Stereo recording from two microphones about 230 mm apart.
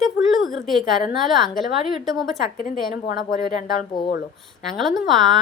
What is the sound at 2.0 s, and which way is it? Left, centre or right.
Speech, centre.